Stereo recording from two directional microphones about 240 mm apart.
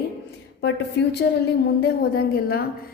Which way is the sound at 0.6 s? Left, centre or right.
Left.